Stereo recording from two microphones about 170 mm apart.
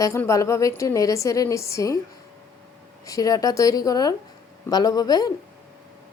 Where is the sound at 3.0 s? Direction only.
20° left (ahead or behind).